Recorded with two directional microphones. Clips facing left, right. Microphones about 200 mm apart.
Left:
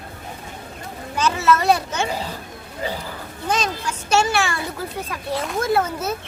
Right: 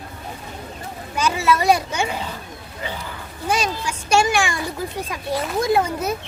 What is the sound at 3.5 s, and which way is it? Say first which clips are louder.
Speech: right 1 dB; 10° right (ahead or behind).